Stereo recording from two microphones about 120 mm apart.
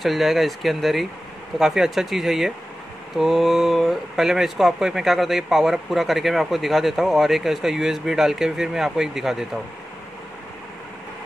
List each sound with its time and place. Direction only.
0.0 s speech: centre (ahead or behind)